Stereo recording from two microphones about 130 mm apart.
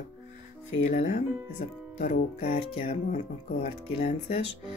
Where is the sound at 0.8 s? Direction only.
65° left (ahead or behind).